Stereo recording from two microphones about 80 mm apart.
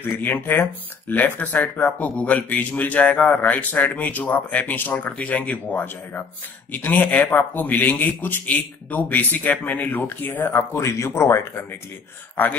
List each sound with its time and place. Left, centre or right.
0.2 s speech: left
10.5 s speech: left